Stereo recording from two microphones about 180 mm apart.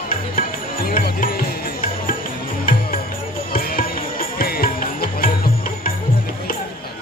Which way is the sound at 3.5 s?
55° left (ahead or behind).